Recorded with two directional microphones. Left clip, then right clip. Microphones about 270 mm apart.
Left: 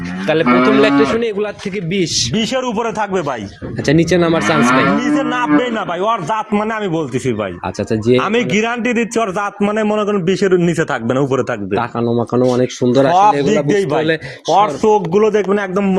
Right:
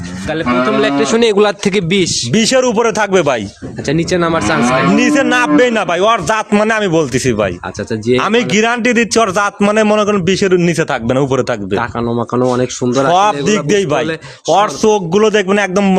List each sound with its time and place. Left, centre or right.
0.6 s speech: centre
1.2 s a man's voice: right
3.8 s speech: centre
4.9 s a man's voice: right
11.7 s speech: centre
13.1 s a man's voice: right